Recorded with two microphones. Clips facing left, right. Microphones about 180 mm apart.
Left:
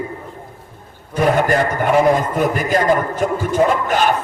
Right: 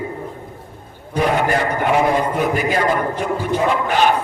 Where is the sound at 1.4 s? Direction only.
45° left (ahead or behind).